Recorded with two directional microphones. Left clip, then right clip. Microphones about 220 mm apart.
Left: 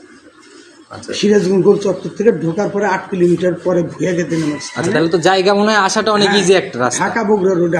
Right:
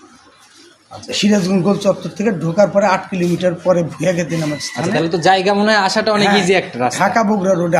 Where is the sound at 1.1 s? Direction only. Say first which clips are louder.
Left 4 dB; 50° right (ahead or behind).